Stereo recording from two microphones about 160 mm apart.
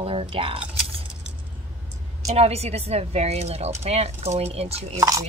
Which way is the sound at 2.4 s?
40° right (ahead or behind).